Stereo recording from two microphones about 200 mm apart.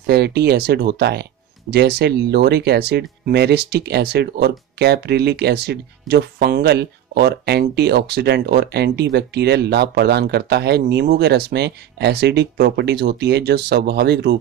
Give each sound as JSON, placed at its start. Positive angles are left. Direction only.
{"t": 0.0, "sound": "speech", "side_deg": -55}